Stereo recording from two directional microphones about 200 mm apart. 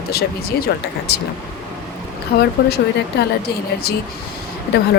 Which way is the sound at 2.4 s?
55° left (ahead or behind).